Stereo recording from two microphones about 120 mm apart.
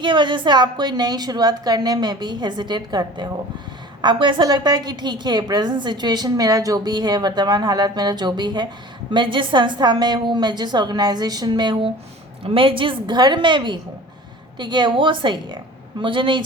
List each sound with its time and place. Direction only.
0.0 s a woman's voice: 40° right (ahead or behind)
12.4 s a woman's voice: 50° right (ahead or behind)